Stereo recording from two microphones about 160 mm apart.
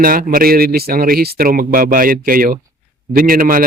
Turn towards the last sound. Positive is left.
turn(degrees=-60)  # may be behind; listen again after turning